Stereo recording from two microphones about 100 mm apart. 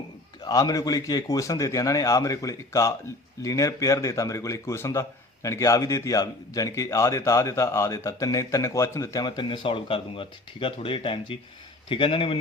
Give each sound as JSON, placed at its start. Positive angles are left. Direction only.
{"t": 0.4, "sound": "a man's voice", "side_deg": 35}
{"t": 9.2, "sound": "speech", "side_deg": 50}